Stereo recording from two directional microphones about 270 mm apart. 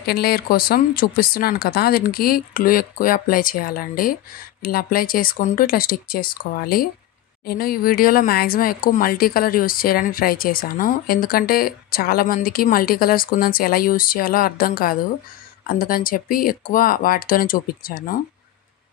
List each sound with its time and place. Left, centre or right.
0.0 s speech: left